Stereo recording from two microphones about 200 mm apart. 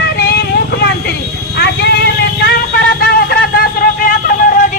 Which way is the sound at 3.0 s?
45° left (ahead or behind).